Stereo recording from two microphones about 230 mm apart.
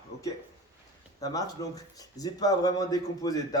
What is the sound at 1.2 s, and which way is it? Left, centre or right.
Speech, centre.